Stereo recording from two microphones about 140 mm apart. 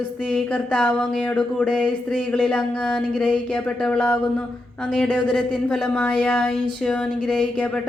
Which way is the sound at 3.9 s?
10° left (ahead or behind).